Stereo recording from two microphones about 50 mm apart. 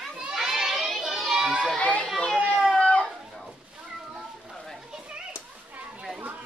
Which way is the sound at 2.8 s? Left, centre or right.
Left.